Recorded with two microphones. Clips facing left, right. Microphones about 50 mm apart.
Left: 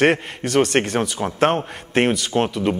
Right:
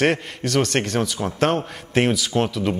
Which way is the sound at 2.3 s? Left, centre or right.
Centre.